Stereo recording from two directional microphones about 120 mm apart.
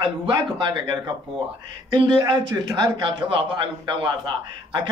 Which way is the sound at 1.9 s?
45° right (ahead or behind).